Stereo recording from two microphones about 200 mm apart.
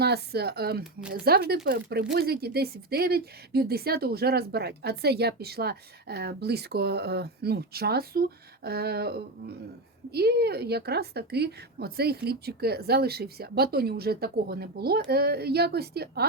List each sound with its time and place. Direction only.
0.0 s speech: 55° right (ahead or behind)